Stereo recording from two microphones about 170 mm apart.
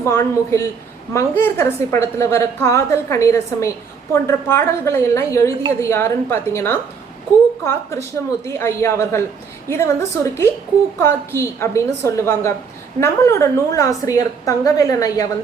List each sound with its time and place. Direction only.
0.0 s a woman's voice: 15° left (ahead or behind)